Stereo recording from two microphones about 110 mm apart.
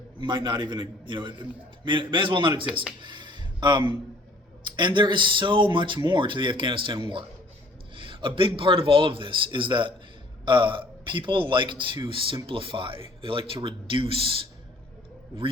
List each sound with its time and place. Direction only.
0.2 s a man's voice: 45° right (ahead or behind)
3.0 s a sound: 45° right (ahead or behind)
4.6 s a man's voice: 45° right (ahead or behind)